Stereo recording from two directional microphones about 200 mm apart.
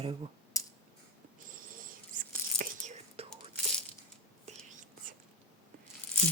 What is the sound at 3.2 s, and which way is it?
Whispering, 30° right (ahead or behind).